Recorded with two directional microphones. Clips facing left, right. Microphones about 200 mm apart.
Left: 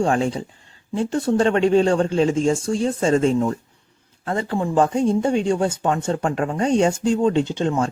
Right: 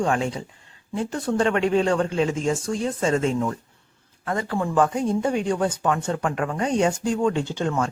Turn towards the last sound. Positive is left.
turn(degrees=25)  # may be behind; listen again after turning